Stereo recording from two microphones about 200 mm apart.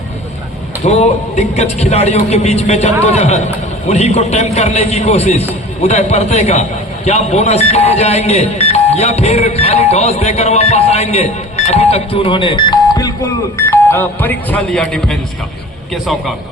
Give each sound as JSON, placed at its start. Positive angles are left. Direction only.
{"t": 0.9, "sound": "a man's voice", "side_deg": 35}